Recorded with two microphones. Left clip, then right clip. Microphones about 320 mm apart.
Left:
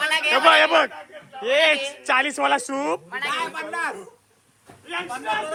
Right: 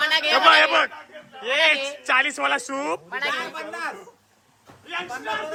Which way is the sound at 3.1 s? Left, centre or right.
Right.